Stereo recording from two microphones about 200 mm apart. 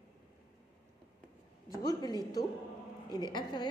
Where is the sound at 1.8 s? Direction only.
20° left (ahead or behind).